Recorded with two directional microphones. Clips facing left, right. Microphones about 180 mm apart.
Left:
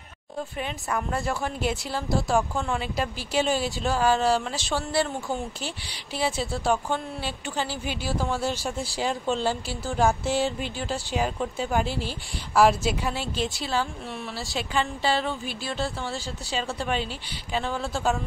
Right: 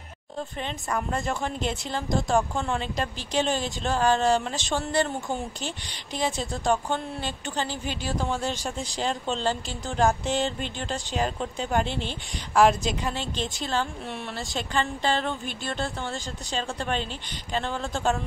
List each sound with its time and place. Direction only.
0.6 s a woman's voice: 5° left (ahead or behind)
4.6 s speech: 20° right (ahead or behind)
5.6 s a woman's voice: 5° left (ahead or behind)